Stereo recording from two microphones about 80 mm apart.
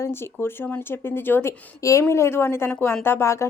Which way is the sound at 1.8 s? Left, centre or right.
Left.